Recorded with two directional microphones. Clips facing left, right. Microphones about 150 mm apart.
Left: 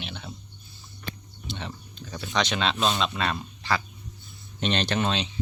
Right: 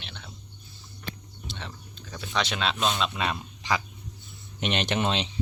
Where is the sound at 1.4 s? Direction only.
Centre (ahead or behind).